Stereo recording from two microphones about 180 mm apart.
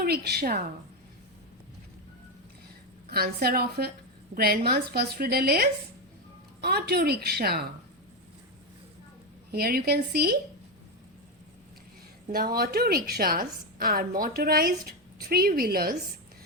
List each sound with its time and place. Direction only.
0.0 s a woman's voice: 60° right (ahead or behind)
3.1 s a woman's voice: 60° right (ahead or behind)
9.5 s a woman's voice: 60° right (ahead or behind)
12.3 s a woman's voice: 55° right (ahead or behind)